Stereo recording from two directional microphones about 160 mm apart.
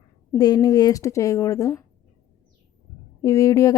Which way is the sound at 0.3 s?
25° left (ahead or behind).